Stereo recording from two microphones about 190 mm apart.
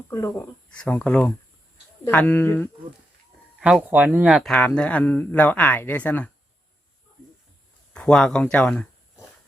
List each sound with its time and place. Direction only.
0.1 s speech: 15° left (ahead or behind)
3.6 s speech: 5° right (ahead or behind)
7.9 s speech: 5° left (ahead or behind)